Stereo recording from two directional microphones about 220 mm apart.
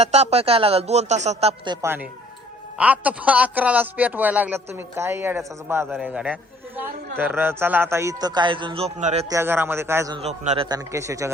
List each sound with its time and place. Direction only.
0.0 s a man's voice: 30° right (ahead or behind)
9.3 s a man's voice: 10° right (ahead or behind)
10.2 s speech: 30° right (ahead or behind)
10.7 s a man's voice: 15° right (ahead or behind)